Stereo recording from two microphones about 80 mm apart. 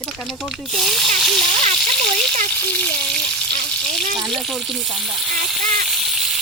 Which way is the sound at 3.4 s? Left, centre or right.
Centre.